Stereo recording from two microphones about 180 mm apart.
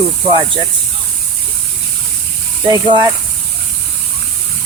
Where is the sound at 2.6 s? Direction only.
25° right (ahead or behind).